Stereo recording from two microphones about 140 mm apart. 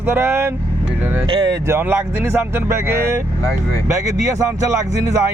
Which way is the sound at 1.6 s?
20° right (ahead or behind).